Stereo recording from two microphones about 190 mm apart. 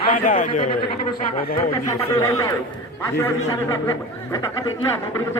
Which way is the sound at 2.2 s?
15° left (ahead or behind).